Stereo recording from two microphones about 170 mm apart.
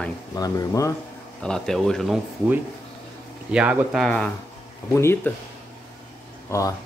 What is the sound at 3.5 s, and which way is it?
Speech, 5° right (ahead or behind).